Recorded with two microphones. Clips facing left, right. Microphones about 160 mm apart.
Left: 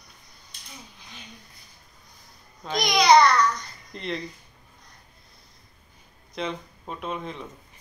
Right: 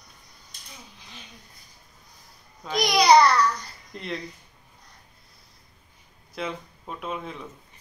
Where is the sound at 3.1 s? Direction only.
5° right (ahead or behind).